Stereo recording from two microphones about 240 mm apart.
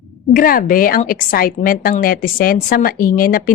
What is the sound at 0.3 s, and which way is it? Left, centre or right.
Speech, left.